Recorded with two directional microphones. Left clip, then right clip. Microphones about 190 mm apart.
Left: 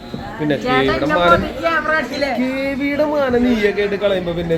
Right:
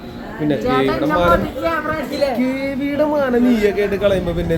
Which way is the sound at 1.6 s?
60° right (ahead or behind).